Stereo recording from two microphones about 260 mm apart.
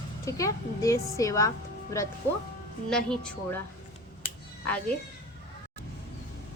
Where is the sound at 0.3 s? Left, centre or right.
Centre.